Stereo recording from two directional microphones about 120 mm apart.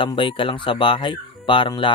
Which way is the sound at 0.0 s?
45° left (ahead or behind).